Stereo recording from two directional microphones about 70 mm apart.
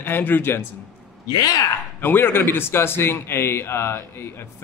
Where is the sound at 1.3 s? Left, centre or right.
Left.